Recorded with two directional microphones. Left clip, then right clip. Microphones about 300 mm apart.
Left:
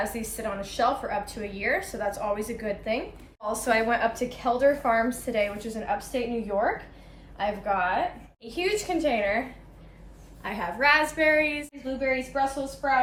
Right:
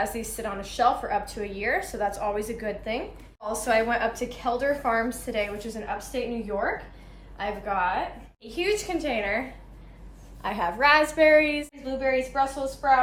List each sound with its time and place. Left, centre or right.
0.0 s a woman's voice: centre
10.4 s a woman's voice: centre